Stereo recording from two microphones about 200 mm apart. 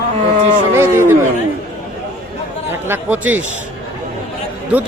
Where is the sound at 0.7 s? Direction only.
10° right (ahead or behind).